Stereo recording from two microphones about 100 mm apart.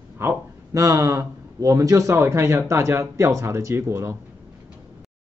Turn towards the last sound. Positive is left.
turn(degrees=-30)  # may be behind; listen again after turning